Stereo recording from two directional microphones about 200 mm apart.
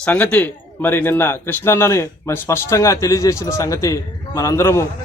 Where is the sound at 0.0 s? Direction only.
5° left (ahead or behind).